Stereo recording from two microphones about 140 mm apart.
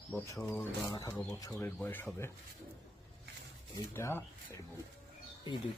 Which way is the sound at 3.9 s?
15° left (ahead or behind).